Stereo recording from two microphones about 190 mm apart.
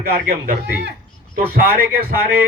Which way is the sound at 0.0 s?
55° right (ahead or behind).